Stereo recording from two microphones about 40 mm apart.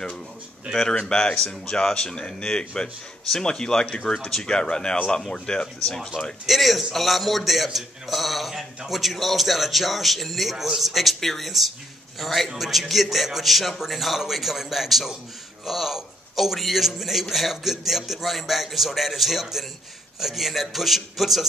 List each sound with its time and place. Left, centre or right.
0.7 s speech: centre
6.4 s a man's voice: centre